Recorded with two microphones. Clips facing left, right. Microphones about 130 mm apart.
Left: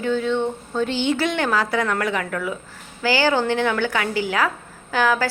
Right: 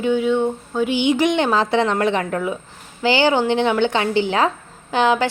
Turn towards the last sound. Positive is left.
turn(degrees=-20)  # may be behind; listen again after turning